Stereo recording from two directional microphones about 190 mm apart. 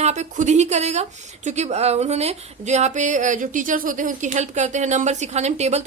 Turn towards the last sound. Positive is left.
turn(degrees=-35)  # may be behind; listen again after turning